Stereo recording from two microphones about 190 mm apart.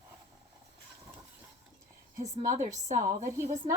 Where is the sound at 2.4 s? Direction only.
40° right (ahead or behind).